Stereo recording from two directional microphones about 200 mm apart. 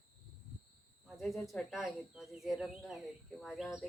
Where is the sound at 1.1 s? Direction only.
Centre (ahead or behind).